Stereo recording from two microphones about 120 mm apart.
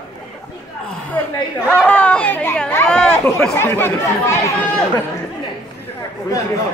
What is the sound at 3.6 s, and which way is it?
Speech, 20° left (ahead or behind).